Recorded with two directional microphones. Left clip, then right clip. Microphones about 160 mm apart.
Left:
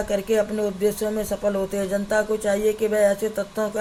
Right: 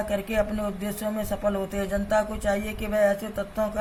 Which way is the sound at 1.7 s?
50° left (ahead or behind).